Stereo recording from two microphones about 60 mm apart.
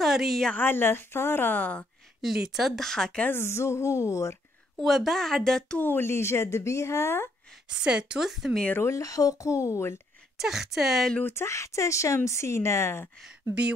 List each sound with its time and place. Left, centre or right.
0.0 s a sound: centre
0.6 s a woman's voice: left
2.2 s speech: centre
3.3 s speech: left
4.8 s speech: centre
5.8 s speech: left
7.7 s a woman's voice: centre
8.3 s speech: centre
8.9 s speech: left
10.4 s speech: centre
11.2 s speech: left